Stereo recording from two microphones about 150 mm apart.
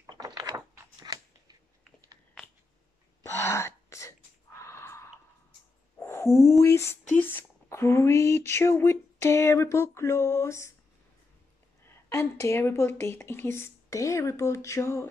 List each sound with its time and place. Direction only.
0.1 s a sound: 25° right (ahead or behind)
1.1 s scissors: 25° right (ahead or behind)
3.2 s gasp: 20° left (ahead or behind)
4.6 s a sound: 20° left (ahead or behind)
7.1 s speech: 15° left (ahead or behind)
11.8 s speech: 15° left (ahead or behind)